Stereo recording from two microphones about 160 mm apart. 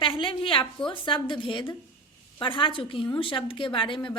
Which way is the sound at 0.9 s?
30° left (ahead or behind).